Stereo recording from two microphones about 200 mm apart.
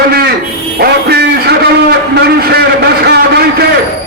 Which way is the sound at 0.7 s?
55° right (ahead or behind).